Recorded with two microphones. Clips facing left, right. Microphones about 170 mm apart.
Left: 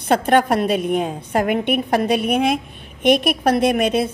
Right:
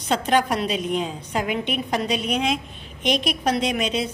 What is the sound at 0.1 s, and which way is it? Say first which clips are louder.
A woman's voice: left 5 dB; 60° left (ahead or behind).